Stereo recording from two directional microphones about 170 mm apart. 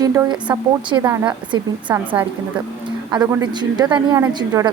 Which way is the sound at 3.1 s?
20° right (ahead or behind).